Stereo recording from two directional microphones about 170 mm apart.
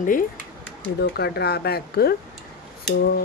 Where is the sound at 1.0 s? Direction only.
70° left (ahead or behind).